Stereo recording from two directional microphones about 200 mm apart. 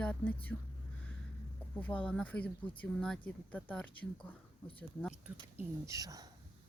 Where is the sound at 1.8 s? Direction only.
10° left (ahead or behind).